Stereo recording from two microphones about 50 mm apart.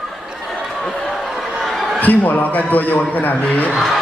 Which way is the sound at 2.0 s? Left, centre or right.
Left.